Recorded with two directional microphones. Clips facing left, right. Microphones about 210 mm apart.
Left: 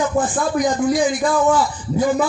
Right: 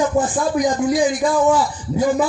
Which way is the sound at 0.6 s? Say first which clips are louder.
Even; 45° right (ahead or behind).